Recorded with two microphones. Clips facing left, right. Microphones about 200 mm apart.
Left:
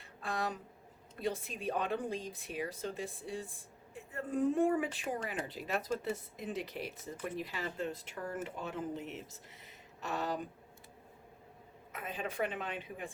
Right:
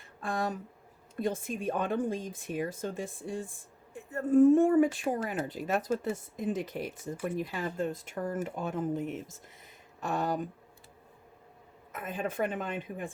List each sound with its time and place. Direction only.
0.2 s speech: 50° right (ahead or behind)
11.9 s speech: 50° right (ahead or behind)